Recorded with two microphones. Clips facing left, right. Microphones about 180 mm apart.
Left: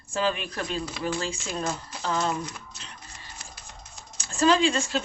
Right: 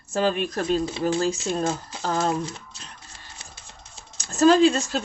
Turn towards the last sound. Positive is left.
turn(degrees=-40)  # may be behind; listen again after turning